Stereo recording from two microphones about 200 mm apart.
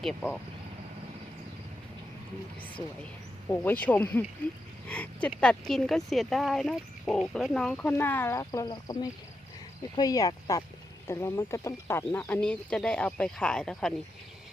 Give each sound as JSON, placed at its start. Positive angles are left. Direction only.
{"t": 0.0, "sound": "speech", "side_deg": 0}
{"t": 3.5, "sound": "speech", "side_deg": 10}